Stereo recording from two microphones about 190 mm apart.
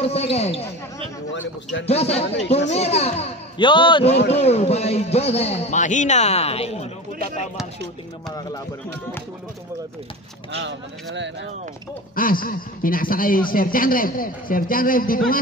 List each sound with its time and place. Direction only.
0.0 s a man's voice: 35° left (ahead or behind)
1.3 s speech: 75° left (ahead or behind)
1.9 s a man's voice: 35° left (ahead or behind)
2.2 s speech: 65° left (ahead or behind)
2.7 s a man's voice: 35° left (ahead or behind)
10.6 s speech: 70° right (ahead or behind)
12.2 s a man's voice: 50° left (ahead or behind)